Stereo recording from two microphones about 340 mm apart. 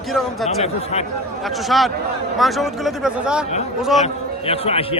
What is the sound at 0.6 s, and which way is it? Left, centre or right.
Speech, centre.